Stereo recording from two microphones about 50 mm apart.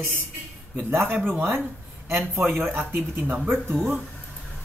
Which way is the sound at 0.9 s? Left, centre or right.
Right.